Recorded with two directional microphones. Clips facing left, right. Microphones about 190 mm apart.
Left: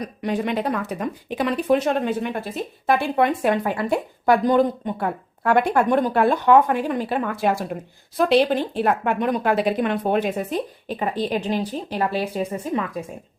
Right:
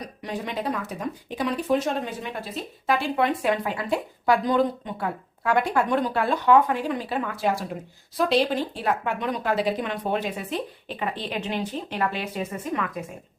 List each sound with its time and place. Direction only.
0.2 s speech: 65° left (ahead or behind); by 12.9 s 30° left (ahead or behind)